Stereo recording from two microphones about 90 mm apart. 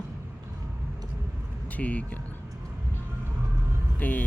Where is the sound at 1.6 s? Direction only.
15° left (ahead or behind).